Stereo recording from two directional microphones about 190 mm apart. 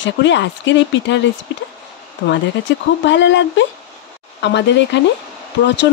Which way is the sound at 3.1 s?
70° left (ahead or behind).